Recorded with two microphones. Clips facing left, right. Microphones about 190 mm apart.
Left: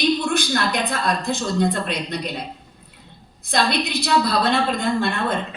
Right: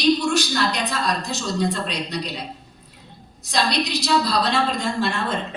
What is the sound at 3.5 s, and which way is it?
A woman's voice, 55° left (ahead or behind).